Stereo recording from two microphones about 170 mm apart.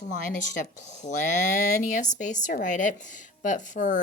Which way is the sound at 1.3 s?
45° left (ahead or behind).